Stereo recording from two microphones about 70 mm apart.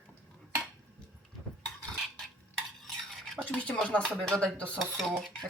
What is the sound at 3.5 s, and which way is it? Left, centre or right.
Speech, centre.